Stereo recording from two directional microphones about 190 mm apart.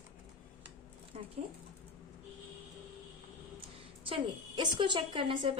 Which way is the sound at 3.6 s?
25° right (ahead or behind).